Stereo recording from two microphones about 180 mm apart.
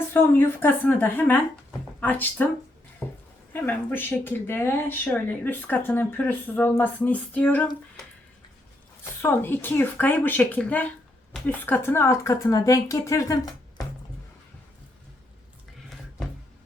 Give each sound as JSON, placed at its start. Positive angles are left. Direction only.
{"t": 0.1, "sound": "speech", "side_deg": 10}
{"t": 3.0, "sound": "a sound", "side_deg": 10}
{"t": 3.5, "sound": "speech", "side_deg": 10}
{"t": 9.2, "sound": "speech", "side_deg": 10}